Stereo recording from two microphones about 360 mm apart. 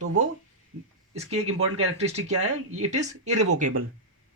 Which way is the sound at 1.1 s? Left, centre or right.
Centre.